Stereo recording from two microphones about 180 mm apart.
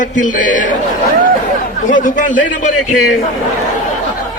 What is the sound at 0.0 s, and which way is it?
Speech, 45° left (ahead or behind).